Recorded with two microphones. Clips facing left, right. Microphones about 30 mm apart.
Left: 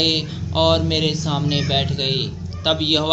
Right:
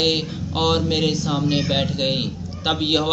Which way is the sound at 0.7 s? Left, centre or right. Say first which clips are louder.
Even; centre.